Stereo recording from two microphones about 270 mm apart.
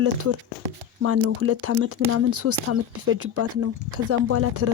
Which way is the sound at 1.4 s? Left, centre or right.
Right.